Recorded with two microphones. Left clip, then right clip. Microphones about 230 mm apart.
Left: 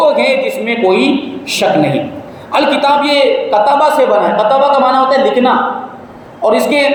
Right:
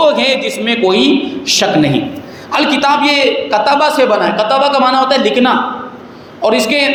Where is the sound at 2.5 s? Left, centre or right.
Right.